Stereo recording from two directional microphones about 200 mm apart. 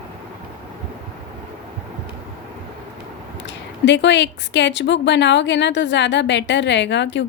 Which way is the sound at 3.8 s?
60° left (ahead or behind).